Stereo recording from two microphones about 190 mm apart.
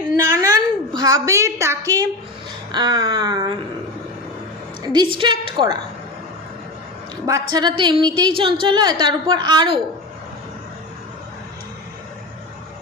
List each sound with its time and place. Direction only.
0.3 s a sound: 20° right (ahead or behind)
2.7 s a woman's voice: 20° right (ahead or behind)
4.8 s a woman's voice: 20° right (ahead or behind)
7.3 s a woman's voice: 20° right (ahead or behind)